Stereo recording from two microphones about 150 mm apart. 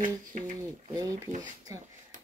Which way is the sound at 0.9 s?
20° right (ahead or behind).